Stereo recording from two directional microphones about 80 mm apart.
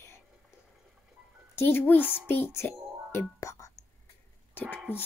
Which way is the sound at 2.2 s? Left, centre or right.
Left.